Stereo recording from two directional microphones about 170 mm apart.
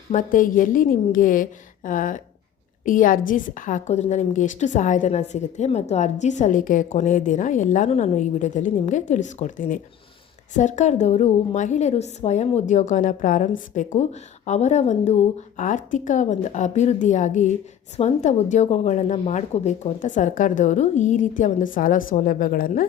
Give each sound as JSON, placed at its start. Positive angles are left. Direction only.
{"t": 0.1, "sound": "a woman's voice", "side_deg": 50}